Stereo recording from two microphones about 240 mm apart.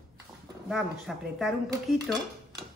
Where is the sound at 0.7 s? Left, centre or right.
Centre.